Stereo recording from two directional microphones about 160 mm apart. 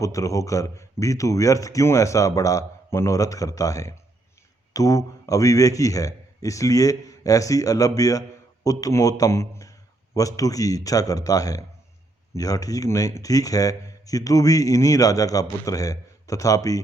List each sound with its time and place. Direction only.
0.0 s speech: 20° left (ahead or behind)